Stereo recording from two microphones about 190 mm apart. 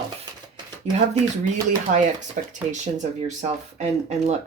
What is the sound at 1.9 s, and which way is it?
Speech, 45° right (ahead or behind).